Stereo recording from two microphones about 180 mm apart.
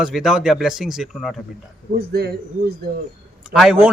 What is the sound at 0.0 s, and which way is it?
Speech, centre (ahead or behind).